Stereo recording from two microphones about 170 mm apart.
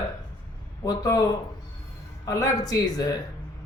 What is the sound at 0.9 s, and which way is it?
Speech, 20° left (ahead or behind).